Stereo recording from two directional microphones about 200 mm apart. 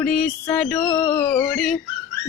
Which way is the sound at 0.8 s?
20° left (ahead or behind).